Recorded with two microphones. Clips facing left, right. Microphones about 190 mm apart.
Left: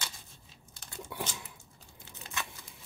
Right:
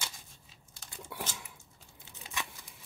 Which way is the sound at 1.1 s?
Centre (ahead or behind).